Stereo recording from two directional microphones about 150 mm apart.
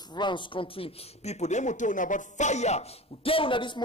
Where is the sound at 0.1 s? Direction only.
30° left (ahead or behind); by 2.8 s 50° left (ahead or behind).